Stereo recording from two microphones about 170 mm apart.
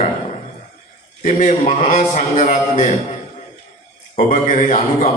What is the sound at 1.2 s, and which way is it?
A man's voice, 45° left (ahead or behind).